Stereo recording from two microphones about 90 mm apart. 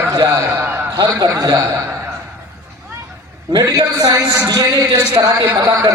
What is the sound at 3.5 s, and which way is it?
A man's voice, 45° right (ahead or behind).